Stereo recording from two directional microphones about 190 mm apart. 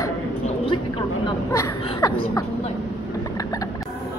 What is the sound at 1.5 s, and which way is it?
Speech, 15° left (ahead or behind).